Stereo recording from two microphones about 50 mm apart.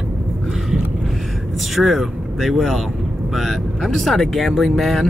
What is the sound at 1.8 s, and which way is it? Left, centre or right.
Speech, centre.